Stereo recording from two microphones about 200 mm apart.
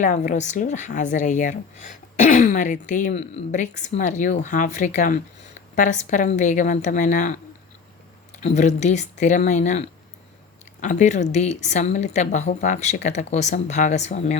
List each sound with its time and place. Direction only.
0.0 s a woman's voice: 40° left (ahead or behind)
8.4 s a woman's voice: 35° left (ahead or behind)